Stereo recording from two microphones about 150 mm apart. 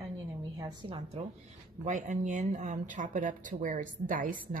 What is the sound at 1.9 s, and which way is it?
Speech, 55° right (ahead or behind).